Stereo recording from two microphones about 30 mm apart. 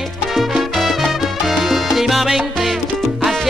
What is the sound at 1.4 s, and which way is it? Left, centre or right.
Salsa music, centre.